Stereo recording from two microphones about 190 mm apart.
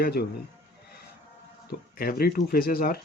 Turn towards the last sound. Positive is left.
turn(degrees=50)  # may be behind; listen again after turning